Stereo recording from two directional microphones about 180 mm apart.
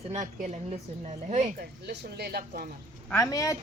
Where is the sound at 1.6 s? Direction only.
60° right (ahead or behind).